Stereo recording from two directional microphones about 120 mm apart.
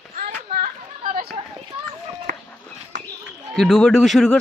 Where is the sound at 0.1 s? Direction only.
90° right.